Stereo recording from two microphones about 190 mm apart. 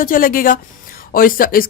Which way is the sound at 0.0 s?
45° left (ahead or behind).